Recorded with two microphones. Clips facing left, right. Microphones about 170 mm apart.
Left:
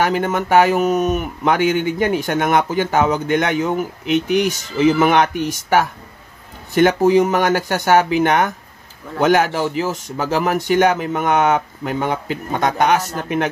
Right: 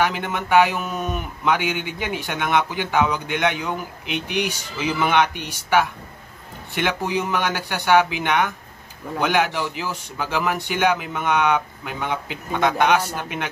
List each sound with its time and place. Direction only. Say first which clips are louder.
0.0 s a man's voice: left 5 dB; 45° left (ahead or behind)